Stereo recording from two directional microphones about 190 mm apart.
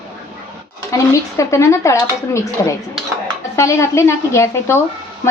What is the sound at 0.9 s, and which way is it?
Speech, 15° left (ahead or behind).